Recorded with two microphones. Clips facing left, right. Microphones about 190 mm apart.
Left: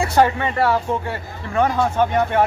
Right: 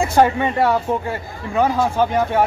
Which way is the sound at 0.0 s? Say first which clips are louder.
Right 2 dB; 15° right (ahead or behind).